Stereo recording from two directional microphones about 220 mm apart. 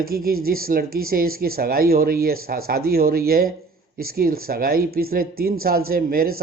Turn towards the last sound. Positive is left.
turn(degrees=-45)  # may be behind; listen again after turning